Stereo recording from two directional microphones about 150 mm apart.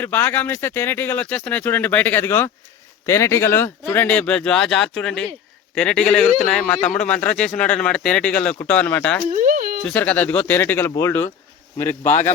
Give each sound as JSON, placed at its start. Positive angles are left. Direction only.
{"t": 0.0, "sound": "speech", "side_deg": 15}
{"t": 9.3, "sound": "a sound", "side_deg": -60}
{"t": 9.8, "sound": "speech", "side_deg": 10}